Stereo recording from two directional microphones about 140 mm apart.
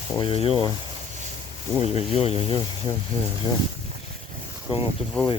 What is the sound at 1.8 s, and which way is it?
Speech, 45° left (ahead or behind).